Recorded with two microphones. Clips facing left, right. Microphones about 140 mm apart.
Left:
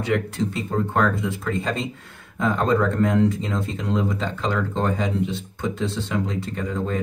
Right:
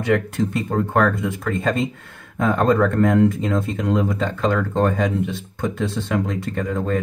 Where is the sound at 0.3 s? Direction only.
55° right (ahead or behind).